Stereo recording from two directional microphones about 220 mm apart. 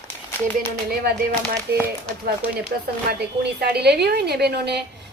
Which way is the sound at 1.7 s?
50° right (ahead or behind).